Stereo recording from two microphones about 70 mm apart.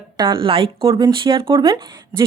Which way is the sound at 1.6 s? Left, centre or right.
Right.